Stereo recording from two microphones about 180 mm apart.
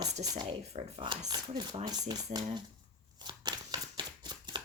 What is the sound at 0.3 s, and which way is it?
Speech, 30° right (ahead or behind).